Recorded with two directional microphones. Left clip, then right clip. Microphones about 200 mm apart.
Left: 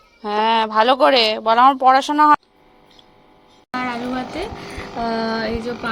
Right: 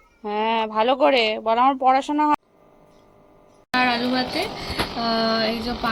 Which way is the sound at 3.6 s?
Centre (ahead or behind).